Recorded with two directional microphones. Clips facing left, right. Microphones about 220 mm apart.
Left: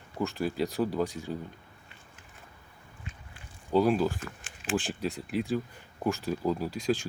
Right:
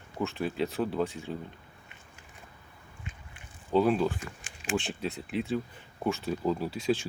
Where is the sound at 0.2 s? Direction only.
Centre (ahead or behind).